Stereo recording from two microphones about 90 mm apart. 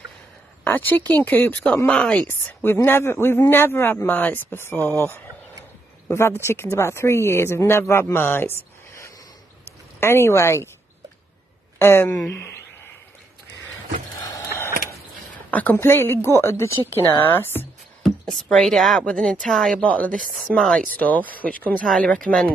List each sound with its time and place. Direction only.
0.7 s speech: 20° left (ahead or behind)
1.9 s speech: 10° left (ahead or behind)
2.2 s speech: 25° left (ahead or behind)
11.8 s speech: 25° left (ahead or behind)
14.5 s a sound: 25° left (ahead or behind)
15.5 s speech: 20° left (ahead or behind)
18.0 s speech: centre (ahead or behind)
19.8 s speech: 15° left (ahead or behind)
20.2 s speech: centre (ahead or behind)
20.9 s speech: 20° left (ahead or behind)
21.8 s speech: 5° left (ahead or behind)